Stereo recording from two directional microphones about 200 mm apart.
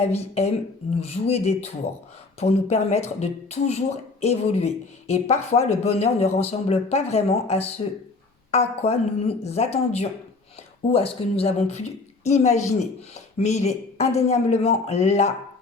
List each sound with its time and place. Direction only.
0.0 s speech: 30° left (ahead or behind)